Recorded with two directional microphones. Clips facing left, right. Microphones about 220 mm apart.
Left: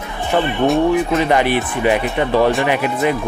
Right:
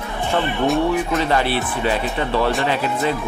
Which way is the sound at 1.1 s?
15° left (ahead or behind).